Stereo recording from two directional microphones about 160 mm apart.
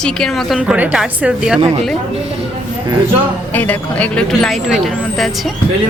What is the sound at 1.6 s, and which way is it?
Speech, 40° right (ahead or behind).